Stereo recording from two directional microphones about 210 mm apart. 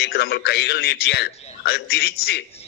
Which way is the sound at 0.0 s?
50° left (ahead or behind).